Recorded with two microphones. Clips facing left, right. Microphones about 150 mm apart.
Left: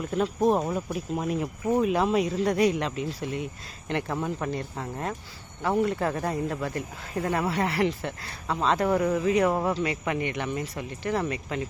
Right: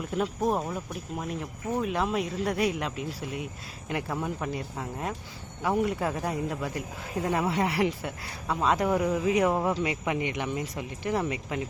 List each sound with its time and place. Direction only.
0.1 s speech: 10° right (ahead or behind)
0.9 s speech: 5° left (ahead or behind); by 11.6 s 15° right (ahead or behind)